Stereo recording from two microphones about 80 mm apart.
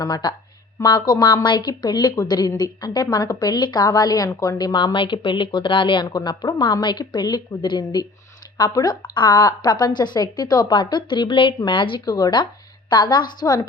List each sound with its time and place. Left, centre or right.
0.0 s speech: left
3.8 s a woman's voice: left